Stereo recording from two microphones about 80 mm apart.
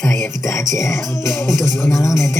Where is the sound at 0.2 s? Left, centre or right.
Left.